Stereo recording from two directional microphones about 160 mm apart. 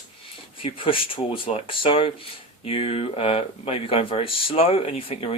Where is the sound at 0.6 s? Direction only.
35° left (ahead or behind).